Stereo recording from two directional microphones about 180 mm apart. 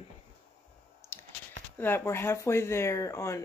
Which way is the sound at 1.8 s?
10° left (ahead or behind).